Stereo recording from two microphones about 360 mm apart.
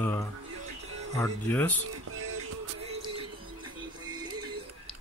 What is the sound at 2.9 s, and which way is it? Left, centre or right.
Music, centre.